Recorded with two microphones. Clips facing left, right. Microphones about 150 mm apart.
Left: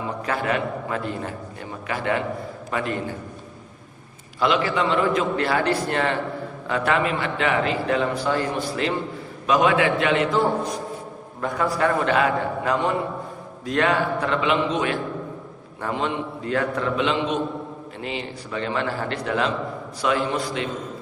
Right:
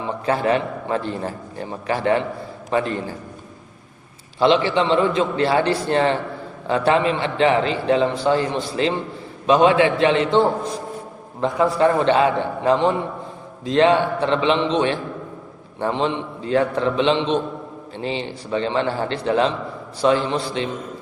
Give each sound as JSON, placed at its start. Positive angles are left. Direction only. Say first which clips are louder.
{"t": 0.3, "sound": "a man's voice", "louder": "right 5 dB", "side_deg": -30}
{"t": 4.4, "sound": "a man's voice", "louder": "right 5 dB", "side_deg": -30}